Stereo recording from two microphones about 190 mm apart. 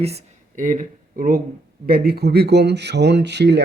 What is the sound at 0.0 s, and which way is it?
A man's voice, 35° right (ahead or behind).